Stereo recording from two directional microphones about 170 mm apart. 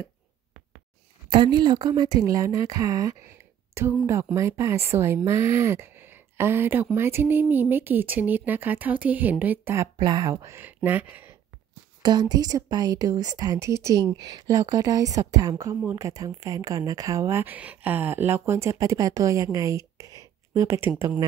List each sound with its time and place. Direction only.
1.3 s speech: 30° right (ahead or behind); by 11.3 s 10° right (ahead or behind)
12.0 s speech: 25° right (ahead or behind)